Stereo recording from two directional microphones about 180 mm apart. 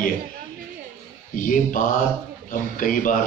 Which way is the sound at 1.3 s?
45° left (ahead or behind).